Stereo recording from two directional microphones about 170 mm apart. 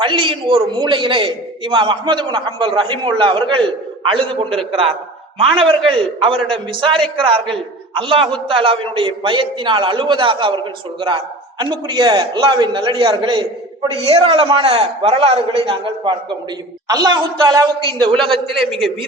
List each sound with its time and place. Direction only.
0.0 s a man's voice: 30° right (ahead or behind)
11.6 s a man's voice: 25° right (ahead or behind)
18.1 s a man's voice: 5° left (ahead or behind)